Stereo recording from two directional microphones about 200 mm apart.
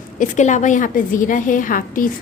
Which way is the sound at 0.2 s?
35° left (ahead or behind).